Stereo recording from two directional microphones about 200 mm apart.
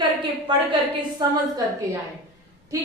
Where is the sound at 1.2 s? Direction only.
20° right (ahead or behind).